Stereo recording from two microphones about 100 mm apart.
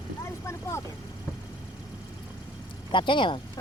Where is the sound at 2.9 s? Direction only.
55° left (ahead or behind).